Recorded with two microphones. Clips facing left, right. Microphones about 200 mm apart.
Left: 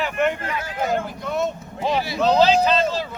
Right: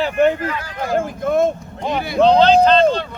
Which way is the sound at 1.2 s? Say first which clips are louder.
Right 8 dB; 50° right (ahead or behind).